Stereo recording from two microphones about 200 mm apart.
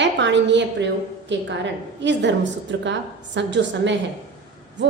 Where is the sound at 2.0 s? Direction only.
65° right (ahead or behind).